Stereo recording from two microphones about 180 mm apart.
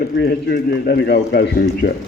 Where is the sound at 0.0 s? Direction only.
60° left (ahead or behind).